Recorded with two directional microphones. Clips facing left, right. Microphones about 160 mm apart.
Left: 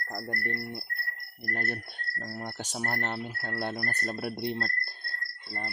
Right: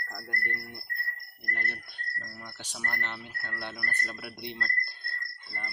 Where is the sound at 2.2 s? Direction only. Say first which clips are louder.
Left 8 dB; 60° left (ahead or behind).